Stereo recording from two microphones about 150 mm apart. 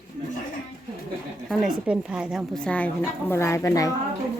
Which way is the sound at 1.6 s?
5° right (ahead or behind).